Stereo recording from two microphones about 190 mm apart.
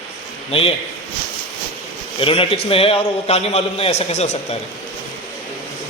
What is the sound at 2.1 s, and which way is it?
A man's voice, 30° left (ahead or behind).